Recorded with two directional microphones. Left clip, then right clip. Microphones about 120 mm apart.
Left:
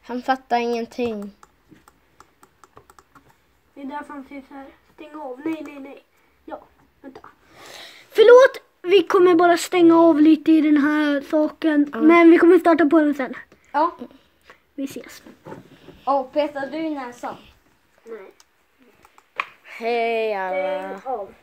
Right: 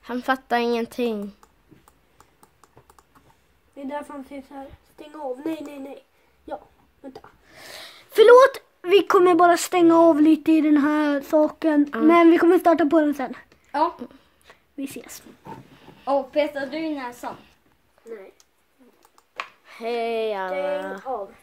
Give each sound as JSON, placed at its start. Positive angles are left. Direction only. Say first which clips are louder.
{"t": 0.0, "sound": "a woman's voice", "louder": "left 1 dB", "side_deg": -25}
{"t": 3.7, "sound": "a woman's voice", "louder": "even", "side_deg": -25}
{"t": 7.1, "sound": "speech", "louder": "even", "side_deg": -20}
{"t": 12.1, "sound": "a woman's voice", "louder": "left 3 dB", "side_deg": -10}
{"t": 13.9, "sound": "a sound", "louder": "even", "side_deg": -25}
{"t": 16.1, "sound": "a woman's voice", "louder": "left 1 dB", "side_deg": -40}
{"t": 19.7, "sound": "a woman's voice", "louder": "left 4 dB", "side_deg": 0}